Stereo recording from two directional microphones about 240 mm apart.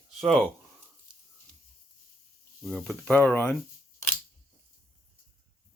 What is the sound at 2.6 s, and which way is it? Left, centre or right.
Speech, centre.